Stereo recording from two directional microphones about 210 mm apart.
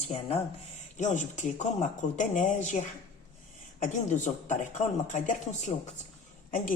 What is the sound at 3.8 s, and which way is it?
A woman's voice, 35° left (ahead or behind).